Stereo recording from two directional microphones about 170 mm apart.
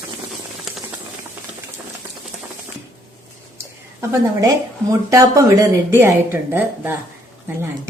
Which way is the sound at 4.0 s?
15° right (ahead or behind).